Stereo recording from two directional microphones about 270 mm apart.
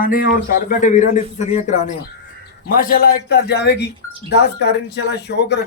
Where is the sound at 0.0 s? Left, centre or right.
Left.